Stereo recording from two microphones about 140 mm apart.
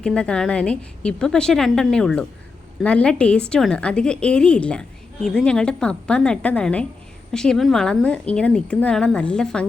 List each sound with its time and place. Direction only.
0.0 s a woman's voice: 5° left (ahead or behind)